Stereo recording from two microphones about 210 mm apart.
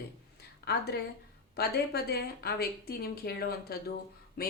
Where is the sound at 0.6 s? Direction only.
50° left (ahead or behind).